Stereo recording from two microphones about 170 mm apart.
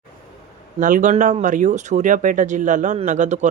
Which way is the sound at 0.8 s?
50° right (ahead or behind).